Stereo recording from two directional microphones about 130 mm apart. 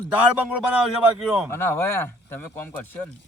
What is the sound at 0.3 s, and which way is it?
Speech, 10° right (ahead or behind).